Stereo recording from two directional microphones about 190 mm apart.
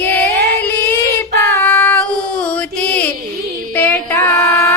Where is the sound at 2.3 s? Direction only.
5° left (ahead or behind).